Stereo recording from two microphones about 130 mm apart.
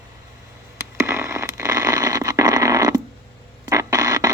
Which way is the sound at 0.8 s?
20° right (ahead or behind).